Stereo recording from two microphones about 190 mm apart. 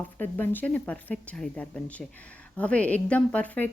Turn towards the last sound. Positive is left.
turn(degrees=10)  # may be behind; listen again after turning